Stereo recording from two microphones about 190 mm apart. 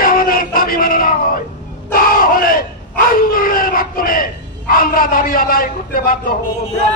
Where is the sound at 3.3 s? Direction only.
50° left (ahead or behind).